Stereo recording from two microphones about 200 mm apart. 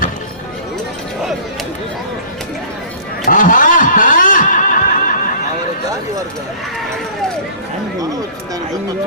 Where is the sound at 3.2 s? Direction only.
40° left (ahead or behind).